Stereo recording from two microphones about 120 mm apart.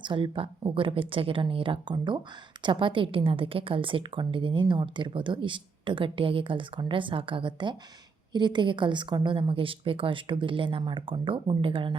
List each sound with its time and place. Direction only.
0.0 s speech: 45° right (ahead or behind)